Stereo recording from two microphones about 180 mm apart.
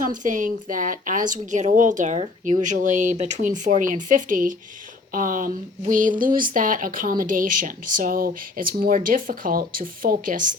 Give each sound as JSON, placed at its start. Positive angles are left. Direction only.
{"t": 0.0, "sound": "speech", "side_deg": -45}